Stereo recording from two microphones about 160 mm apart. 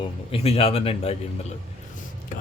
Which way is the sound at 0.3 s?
40° left (ahead or behind).